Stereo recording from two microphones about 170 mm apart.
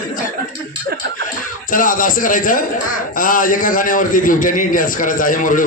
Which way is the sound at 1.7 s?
55° left (ahead or behind).